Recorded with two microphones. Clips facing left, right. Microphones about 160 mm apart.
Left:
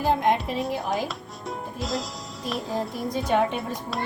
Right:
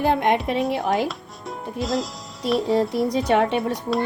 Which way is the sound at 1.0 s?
Centre (ahead or behind).